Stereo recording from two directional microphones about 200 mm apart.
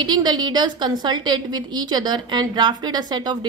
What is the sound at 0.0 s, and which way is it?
A woman's voice, 20° right (ahead or behind).